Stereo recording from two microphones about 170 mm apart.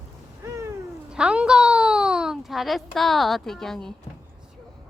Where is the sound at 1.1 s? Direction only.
5° right (ahead or behind).